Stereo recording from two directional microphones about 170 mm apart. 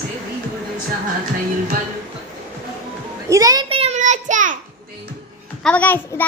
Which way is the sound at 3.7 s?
35° right (ahead or behind).